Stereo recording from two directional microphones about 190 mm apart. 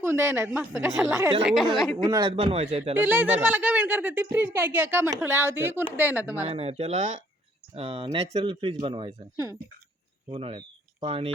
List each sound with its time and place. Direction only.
0.0 s speech: 10° right (ahead or behind)
1.4 s a woman's voice: centre (ahead or behind)
2.0 s speech: 20° right (ahead or behind)
2.9 s speech: 10° right (ahead or behind)
6.4 s speech: 30° right (ahead or behind)
7.8 s speech: 30° right (ahead or behind)
10.2 s speech: 30° right (ahead or behind)